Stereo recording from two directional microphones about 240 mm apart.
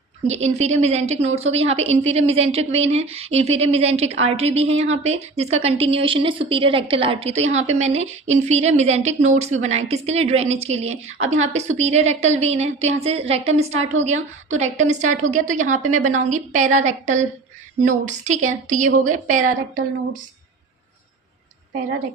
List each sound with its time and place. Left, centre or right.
0.3 s a woman's voice: right